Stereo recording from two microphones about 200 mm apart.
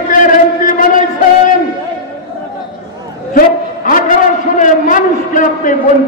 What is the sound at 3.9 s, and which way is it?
A man's voice, 40° left (ahead or behind).